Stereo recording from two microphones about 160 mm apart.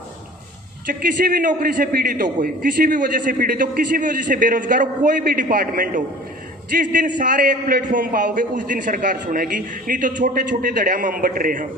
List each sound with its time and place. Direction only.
0.9 s a man's voice: 55° right (ahead or behind)